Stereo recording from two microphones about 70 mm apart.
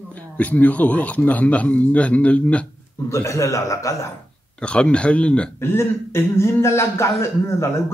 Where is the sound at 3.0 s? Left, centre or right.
Left.